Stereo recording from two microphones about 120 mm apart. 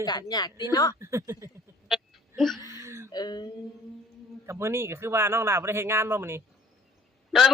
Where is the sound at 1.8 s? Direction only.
Centre (ahead or behind).